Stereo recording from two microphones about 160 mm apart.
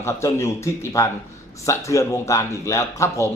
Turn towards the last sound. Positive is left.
turn(degrees=20)  # may be behind; listen again after turning